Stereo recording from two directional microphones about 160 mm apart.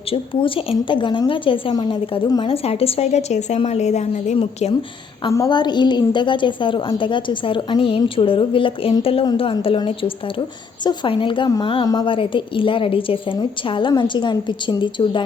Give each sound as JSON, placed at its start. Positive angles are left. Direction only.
{"t": 0.1, "sound": "a woman's voice", "side_deg": 35}
{"t": 5.3, "sound": "a woman's voice", "side_deg": 25}